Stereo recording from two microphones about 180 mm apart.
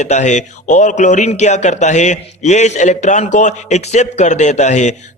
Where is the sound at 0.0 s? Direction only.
40° left (ahead or behind).